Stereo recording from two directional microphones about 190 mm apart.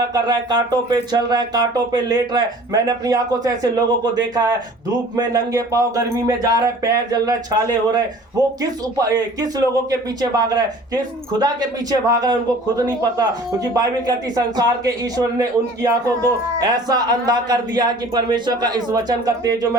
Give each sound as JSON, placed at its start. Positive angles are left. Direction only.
{"t": 0.1, "sound": "speech", "side_deg": -20}
{"t": 9.0, "sound": "speech", "side_deg": -20}